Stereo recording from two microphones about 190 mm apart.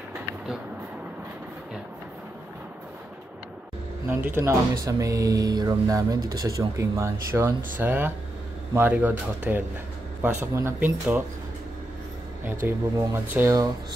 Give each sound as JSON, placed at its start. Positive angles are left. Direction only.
{"t": 4.1, "sound": "speech", "side_deg": -10}
{"t": 12.6, "sound": "speech", "side_deg": -15}